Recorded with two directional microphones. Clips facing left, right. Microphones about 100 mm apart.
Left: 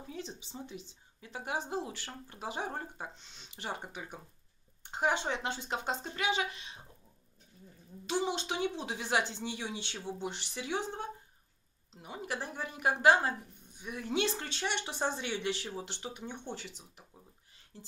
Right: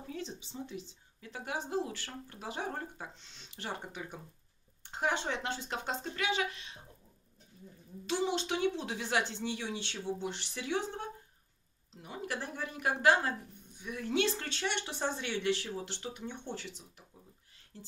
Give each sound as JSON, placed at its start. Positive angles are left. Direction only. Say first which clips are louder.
{"t": 0.1, "sound": "speech", "louder": "right 2 dB", "side_deg": 15}
{"t": 8.1, "sound": "speech", "louder": "right 1 dB", "side_deg": 15}
{"t": 12.0, "sound": "speech", "louder": "even", "side_deg": 15}